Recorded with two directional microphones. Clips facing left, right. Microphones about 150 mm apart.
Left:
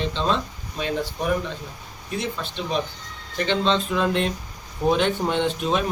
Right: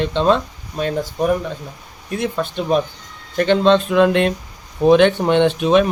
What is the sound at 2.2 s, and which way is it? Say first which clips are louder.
Speech: right 8 dB; 55° right (ahead or behind).